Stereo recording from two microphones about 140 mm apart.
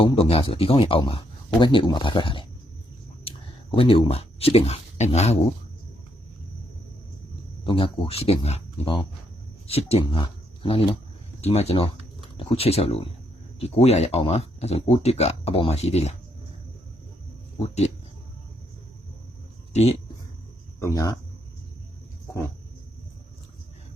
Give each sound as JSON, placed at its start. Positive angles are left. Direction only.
{"t": 0.0, "sound": "speech", "side_deg": 40}
{"t": 7.6, "sound": "speech", "side_deg": 35}
{"t": 11.3, "sound": "speech", "side_deg": 50}
{"t": 19.7, "sound": "speech", "side_deg": 50}
{"t": 20.7, "sound": "speech", "side_deg": 20}